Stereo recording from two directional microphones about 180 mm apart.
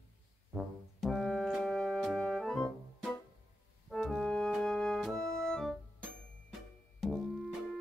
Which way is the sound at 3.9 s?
Centre (ahead or behind).